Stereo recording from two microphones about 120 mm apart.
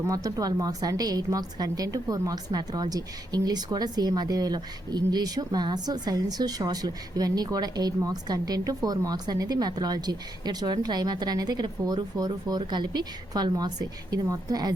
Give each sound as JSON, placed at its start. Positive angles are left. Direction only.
{"t": 0.0, "sound": "a woman's voice", "side_deg": -30}